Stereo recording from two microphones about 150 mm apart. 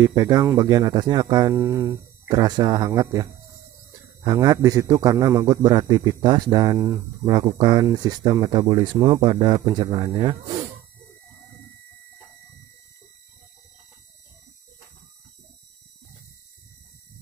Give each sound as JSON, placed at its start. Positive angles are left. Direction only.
{"t": 0.0, "sound": "a man's voice", "side_deg": -20}